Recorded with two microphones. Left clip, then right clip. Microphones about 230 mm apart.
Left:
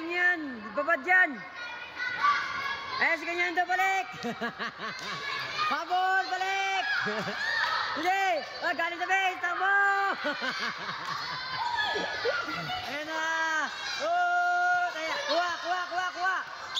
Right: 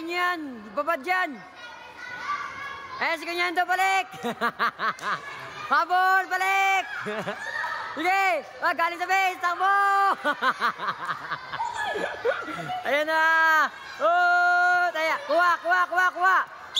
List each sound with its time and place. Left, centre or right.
0.1 s a sound: centre
0.8 s a man's voice: centre
3.1 s a man's voice: right
3.5 s a man's voice: centre
3.8 s speech: right
6.8 s a sound: centre
8.2 s a man's voice: centre
12.9 s speech: right